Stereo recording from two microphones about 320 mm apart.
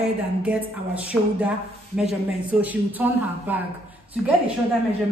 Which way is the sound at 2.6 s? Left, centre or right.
Centre.